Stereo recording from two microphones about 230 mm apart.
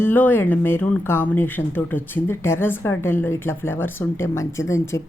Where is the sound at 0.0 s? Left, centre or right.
Centre.